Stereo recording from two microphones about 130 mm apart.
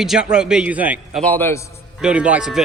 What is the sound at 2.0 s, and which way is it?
Speech, 10° right (ahead or behind).